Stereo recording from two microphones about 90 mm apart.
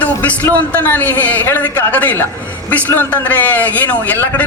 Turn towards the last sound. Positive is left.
turn(degrees=15)  # may be behind; listen again after turning